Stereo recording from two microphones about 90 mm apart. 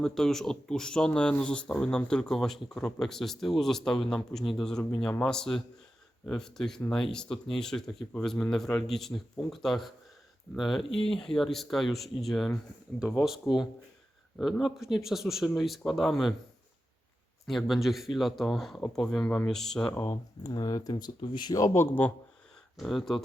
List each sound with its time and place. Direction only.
0.0 s speech: 5° left (ahead or behind)
14.6 s speech: 5° right (ahead or behind)
17.4 s speech: centre (ahead or behind)
19.9 s speech: 30° left (ahead or behind)
20.5 s speech: 45° left (ahead or behind)
20.9 s speech: 65° left (ahead or behind)
21.5 s speech: 30° left (ahead or behind)
22.8 s speech: centre (ahead or behind)